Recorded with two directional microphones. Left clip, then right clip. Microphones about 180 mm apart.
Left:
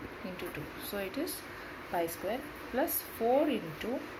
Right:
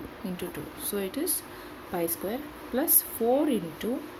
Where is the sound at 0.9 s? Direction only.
65° right (ahead or behind).